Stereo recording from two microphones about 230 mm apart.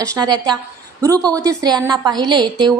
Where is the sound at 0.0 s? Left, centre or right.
Centre.